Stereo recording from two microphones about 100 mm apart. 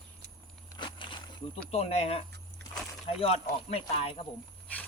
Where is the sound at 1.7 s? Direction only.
90° left.